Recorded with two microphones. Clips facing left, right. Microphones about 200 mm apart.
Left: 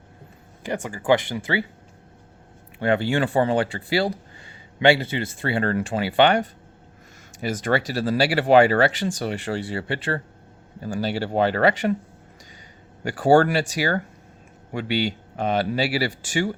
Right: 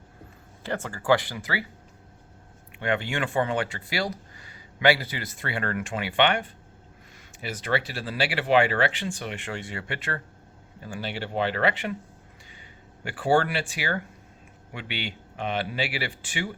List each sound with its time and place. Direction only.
0.6 s speech: 15° left (ahead or behind)
2.7 s speech: 35° left (ahead or behind)
13.1 s speech: 40° left (ahead or behind)